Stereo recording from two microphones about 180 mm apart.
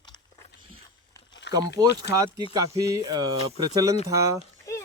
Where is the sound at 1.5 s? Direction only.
70° left (ahead or behind).